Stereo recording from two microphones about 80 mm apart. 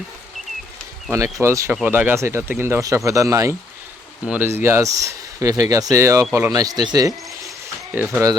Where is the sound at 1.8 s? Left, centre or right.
Right.